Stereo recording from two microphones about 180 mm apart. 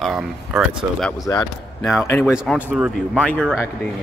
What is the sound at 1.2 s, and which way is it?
Speech, 20° left (ahead or behind).